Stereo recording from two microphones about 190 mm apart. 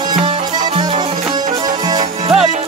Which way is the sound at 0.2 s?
20° right (ahead or behind).